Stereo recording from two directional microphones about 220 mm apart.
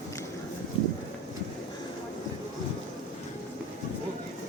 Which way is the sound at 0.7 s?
25° left (ahead or behind).